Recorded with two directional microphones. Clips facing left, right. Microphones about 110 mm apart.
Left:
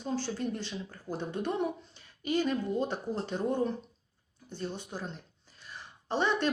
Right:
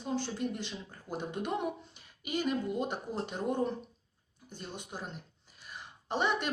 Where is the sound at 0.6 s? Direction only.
15° right (ahead or behind).